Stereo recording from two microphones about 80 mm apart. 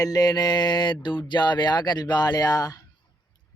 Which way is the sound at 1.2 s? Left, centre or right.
Left.